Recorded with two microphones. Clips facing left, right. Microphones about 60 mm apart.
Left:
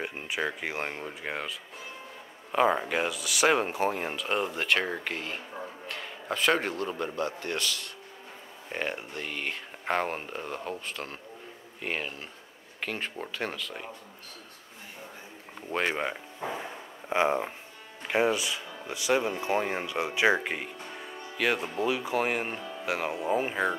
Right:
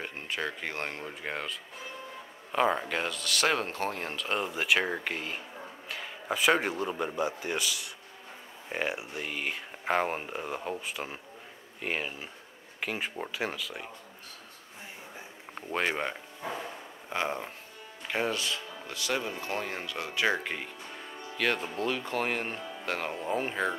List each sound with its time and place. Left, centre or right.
0.0 s speech: centre
15.7 s speech: centre
16.4 s a sound: centre
18.0 s speech: centre